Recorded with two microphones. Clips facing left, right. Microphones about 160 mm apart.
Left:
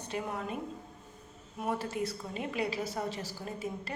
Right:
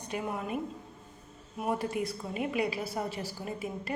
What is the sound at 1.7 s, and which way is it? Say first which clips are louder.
A woman's voice: right 2 dB; 15° right (ahead or behind).